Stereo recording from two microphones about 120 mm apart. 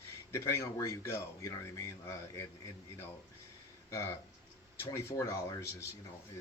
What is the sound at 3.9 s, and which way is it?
Speech, 25° left (ahead or behind).